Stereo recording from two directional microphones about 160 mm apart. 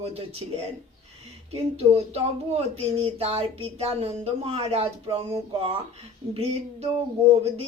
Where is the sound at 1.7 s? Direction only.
40° right (ahead or behind).